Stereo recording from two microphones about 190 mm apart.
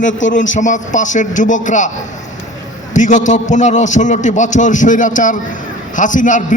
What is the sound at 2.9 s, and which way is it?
A man's voice, 40° left (ahead or behind).